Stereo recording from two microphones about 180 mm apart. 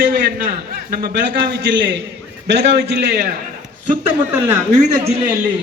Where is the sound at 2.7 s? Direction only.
55° right (ahead or behind).